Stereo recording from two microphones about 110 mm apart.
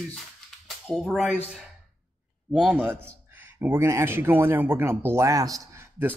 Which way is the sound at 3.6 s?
20° right (ahead or behind).